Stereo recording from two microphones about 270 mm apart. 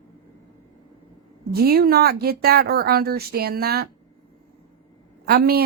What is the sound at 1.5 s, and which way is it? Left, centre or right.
A woman's voice, right.